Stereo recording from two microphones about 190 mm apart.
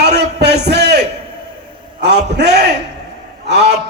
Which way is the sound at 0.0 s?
60° right (ahead or behind).